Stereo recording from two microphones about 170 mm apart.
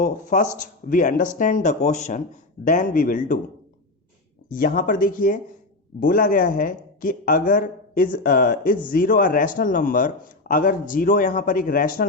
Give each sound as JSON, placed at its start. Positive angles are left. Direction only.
{"t": 0.0, "sound": "speech", "side_deg": 50}
{"t": 4.4, "sound": "speech", "side_deg": 55}